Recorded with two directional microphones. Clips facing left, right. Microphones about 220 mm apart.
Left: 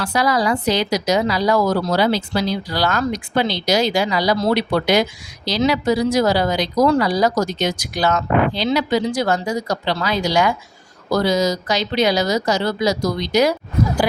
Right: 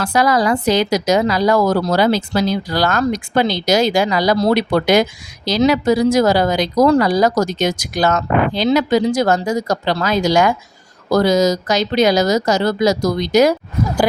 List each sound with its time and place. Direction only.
0.0 s a woman's voice: 50° right (ahead or behind)